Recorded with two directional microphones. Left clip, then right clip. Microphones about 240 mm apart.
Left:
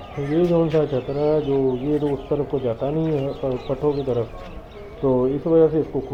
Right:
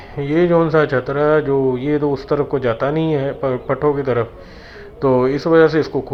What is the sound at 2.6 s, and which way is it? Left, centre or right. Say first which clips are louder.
A man's voice: right 5 dB; centre.